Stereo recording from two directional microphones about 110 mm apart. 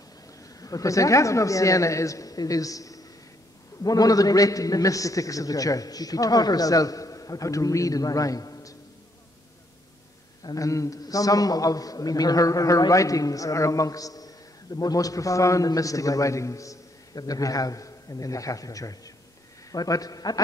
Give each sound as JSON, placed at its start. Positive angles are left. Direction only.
{"t": 0.6, "sound": "a man's voice", "side_deg": 30}
{"t": 10.4, "sound": "a man's voice", "side_deg": 30}